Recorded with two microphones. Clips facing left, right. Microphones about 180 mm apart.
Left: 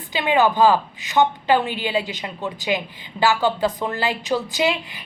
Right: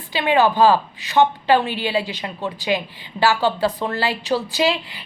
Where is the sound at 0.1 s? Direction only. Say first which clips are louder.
Right 1 dB; 20° left (ahead or behind).